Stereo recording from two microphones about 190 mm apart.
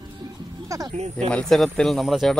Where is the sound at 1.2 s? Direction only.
5° left (ahead or behind).